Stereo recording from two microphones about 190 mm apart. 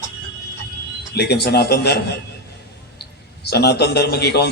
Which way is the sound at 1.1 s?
60° left (ahead or behind).